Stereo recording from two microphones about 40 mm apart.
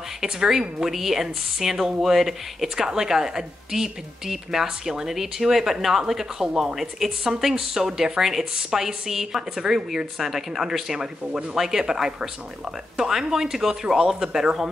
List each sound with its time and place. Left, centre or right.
0.2 s a woman's voice: centre